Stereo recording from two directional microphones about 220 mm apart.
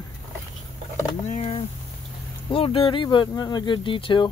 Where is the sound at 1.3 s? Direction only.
30° left (ahead or behind).